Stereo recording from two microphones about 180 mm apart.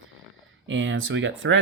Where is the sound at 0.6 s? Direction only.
90° right.